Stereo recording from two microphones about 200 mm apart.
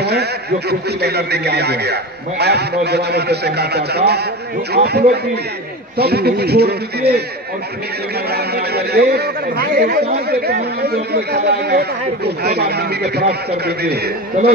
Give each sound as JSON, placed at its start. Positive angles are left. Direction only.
{"t": 0.0, "sound": "a man's voice", "side_deg": -55}
{"t": 8.3, "sound": "a man's voice", "side_deg": -55}
{"t": 14.4, "sound": "a man's voice", "side_deg": -35}